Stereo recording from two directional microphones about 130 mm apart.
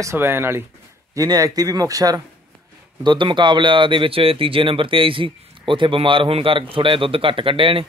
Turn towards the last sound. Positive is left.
turn(degrees=-45)  # may be behind; listen again after turning